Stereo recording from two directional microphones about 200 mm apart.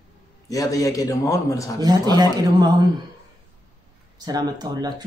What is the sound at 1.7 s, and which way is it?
Speech, 20° right (ahead or behind).